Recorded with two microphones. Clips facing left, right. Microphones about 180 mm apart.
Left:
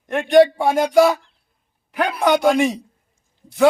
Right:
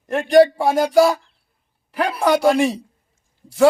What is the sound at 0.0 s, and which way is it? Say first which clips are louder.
Speech: even; 5° right (ahead or behind).